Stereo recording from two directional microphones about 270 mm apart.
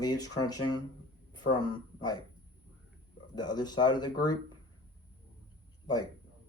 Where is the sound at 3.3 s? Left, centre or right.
Centre.